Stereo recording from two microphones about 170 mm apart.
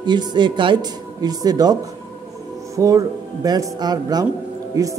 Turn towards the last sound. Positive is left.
turn(degrees=-20)  # may be behind; listen again after turning